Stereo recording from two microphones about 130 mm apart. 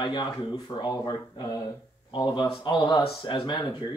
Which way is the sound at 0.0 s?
35° left (ahead or behind).